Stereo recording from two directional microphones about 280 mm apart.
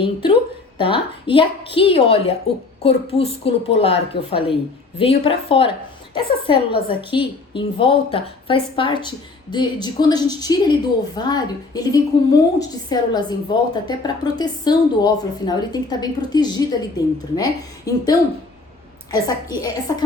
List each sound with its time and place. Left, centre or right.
0.0 s a woman's voice: centre